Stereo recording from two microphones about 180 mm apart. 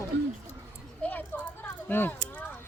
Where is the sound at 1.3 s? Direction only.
10° left (ahead or behind).